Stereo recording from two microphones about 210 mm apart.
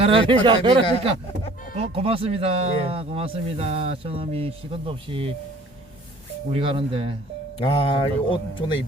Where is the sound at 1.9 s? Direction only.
25° right (ahead or behind).